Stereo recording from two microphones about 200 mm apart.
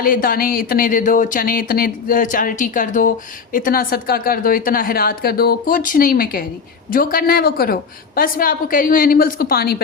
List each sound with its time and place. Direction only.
0.0 s speech: 45° left (ahead or behind)